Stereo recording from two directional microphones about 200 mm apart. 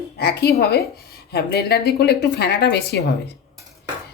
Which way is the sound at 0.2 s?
55° left (ahead or behind).